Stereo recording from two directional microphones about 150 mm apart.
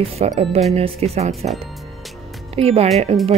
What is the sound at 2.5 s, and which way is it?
Speech, 45° right (ahead or behind).